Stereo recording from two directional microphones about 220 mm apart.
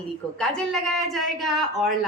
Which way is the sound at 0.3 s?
5° left (ahead or behind).